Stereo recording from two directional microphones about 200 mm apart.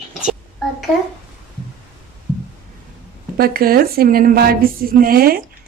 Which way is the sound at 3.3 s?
50° right (ahead or behind).